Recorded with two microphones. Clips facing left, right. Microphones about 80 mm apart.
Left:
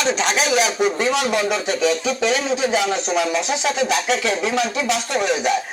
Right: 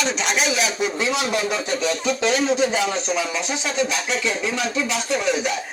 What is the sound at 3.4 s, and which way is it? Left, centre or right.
Speech, left.